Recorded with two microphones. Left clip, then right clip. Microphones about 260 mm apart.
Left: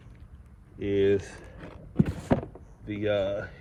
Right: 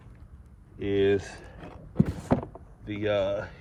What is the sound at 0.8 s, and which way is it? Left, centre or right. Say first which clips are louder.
Speech: even; right.